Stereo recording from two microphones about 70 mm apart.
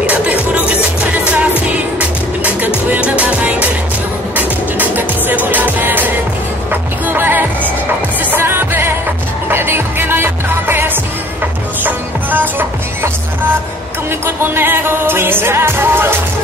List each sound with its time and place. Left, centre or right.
0.0 s music: centre
1.7 s music: right
14.2 s music: right